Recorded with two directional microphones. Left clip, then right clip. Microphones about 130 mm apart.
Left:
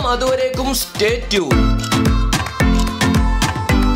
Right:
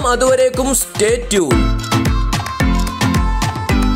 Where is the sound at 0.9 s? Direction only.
45° right (ahead or behind).